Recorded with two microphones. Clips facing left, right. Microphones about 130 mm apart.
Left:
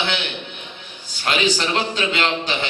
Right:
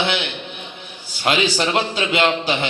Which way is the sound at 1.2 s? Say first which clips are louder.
Right 2 dB; 15° right (ahead or behind).